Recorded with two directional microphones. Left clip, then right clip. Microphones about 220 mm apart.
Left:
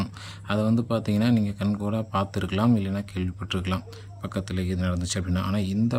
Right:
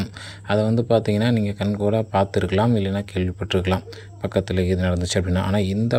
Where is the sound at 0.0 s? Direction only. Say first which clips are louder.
Right 3 dB; 10° right (ahead or behind).